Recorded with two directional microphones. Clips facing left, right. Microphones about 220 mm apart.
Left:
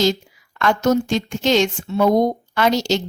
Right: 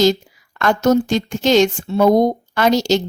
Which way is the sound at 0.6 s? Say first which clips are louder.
Right 3 dB; 40° right (ahead or behind).